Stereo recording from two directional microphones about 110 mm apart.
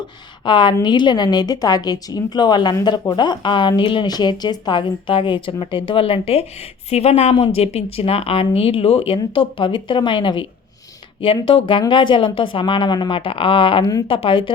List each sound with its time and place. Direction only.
0.4 s a woman's voice: 45° left (ahead or behind); by 9.1 s 65° left (ahead or behind)
9.1 s a woman's voice: 50° left (ahead or behind)
11.4 s a woman's voice: 55° left (ahead or behind)